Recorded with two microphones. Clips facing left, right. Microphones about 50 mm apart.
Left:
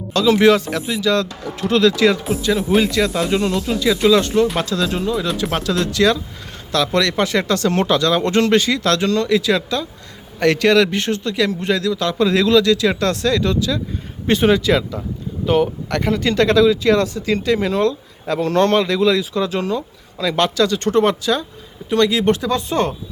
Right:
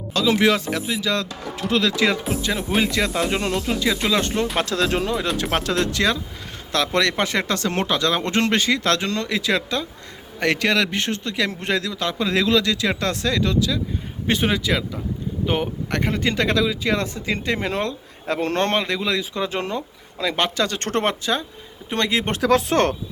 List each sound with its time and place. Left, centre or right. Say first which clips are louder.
0.1 s speech: left 5 dB; centre; by 3.5 s right
3.8 s speech: left 9 dB; centre
4.6 s speech: left 1 dB; right
5.4 s speech: left 2 dB; right
5.8 s speech: left 5 dB; right
10.4 s speech: left 6 dB; centre
15.4 s speech: left 7 dB; centre
18.8 s speech: left 7 dB; centre
19.3 s speech: left 5 dB; right
20.7 s speech: left 7 dB; right
21.0 s speech: left 5 dB; right
22.4 s speech: right 1 dB; right